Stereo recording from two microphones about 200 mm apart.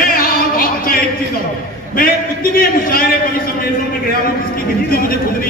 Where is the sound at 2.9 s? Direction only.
45° left (ahead or behind).